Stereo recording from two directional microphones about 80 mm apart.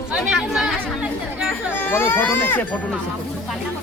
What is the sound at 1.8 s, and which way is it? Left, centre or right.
Speech, left.